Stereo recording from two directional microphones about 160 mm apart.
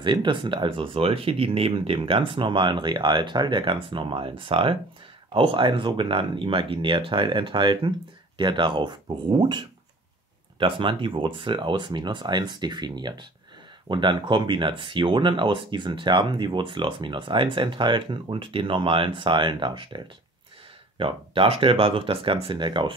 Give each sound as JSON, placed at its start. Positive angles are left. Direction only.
{"t": 0.0, "sound": "speech", "side_deg": -30}